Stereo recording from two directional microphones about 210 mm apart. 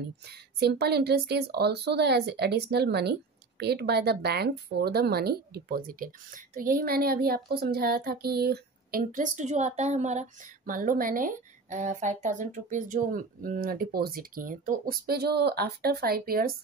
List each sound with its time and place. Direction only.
0.6 s a woman's voice: 50° right (ahead or behind)